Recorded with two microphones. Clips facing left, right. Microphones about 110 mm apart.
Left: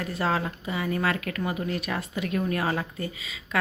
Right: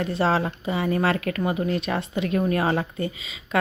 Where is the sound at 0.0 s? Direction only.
30° right (ahead or behind).